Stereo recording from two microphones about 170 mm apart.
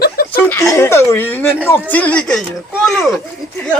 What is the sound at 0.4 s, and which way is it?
Speech, 15° left (ahead or behind).